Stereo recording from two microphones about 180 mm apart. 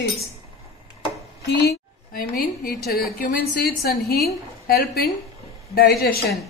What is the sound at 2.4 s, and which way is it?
A woman's voice, 60° left (ahead or behind).